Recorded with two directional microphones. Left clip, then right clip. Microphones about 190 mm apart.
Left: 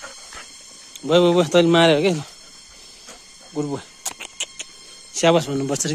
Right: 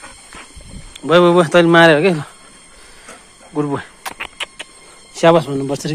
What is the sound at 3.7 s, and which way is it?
Squeal, 10° left (ahead or behind).